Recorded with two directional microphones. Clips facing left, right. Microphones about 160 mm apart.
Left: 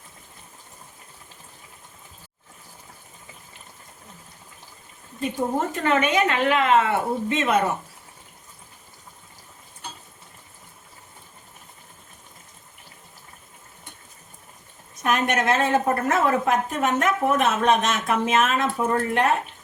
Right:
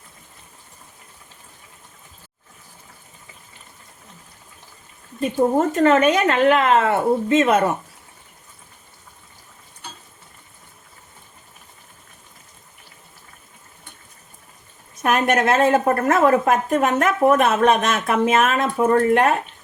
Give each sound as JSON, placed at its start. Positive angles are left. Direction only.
{"t": 5.5, "sound": "a woman's voice", "side_deg": -40}
{"t": 15.0, "sound": "a woman's voice", "side_deg": -55}